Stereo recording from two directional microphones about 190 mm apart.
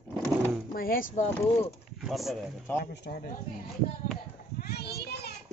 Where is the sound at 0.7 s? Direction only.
50° left (ahead or behind).